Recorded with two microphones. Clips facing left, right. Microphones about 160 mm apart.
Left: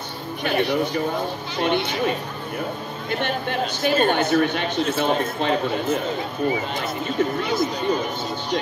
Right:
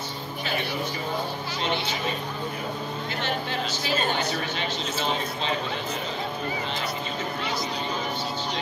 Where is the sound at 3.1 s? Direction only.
55° left (ahead or behind).